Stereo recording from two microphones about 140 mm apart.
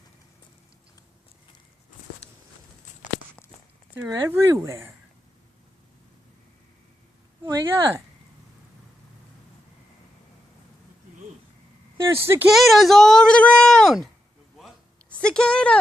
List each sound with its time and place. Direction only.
4.1 s speech: 20° right (ahead or behind)
7.4 s speech: 20° right (ahead or behind)
12.0 s speech: 20° right (ahead or behind)
12.5 s speech: centre (ahead or behind)
15.2 s speech: 5° left (ahead or behind)